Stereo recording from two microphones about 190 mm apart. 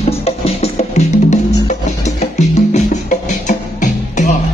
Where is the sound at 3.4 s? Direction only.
40° left (ahead or behind).